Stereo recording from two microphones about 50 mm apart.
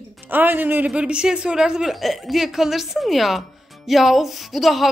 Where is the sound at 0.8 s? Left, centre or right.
Right.